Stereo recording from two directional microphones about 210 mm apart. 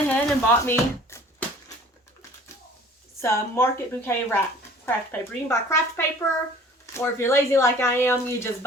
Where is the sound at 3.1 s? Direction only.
10° left (ahead or behind).